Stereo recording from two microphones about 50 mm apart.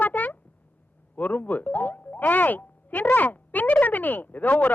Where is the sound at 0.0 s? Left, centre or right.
Left.